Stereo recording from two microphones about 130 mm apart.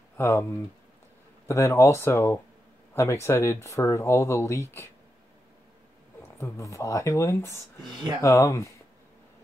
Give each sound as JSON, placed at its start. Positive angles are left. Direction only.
{"t": 0.2, "sound": "speech", "side_deg": 20}
{"t": 1.5, "sound": "speech", "side_deg": 20}
{"t": 6.3, "sound": "speech", "side_deg": 20}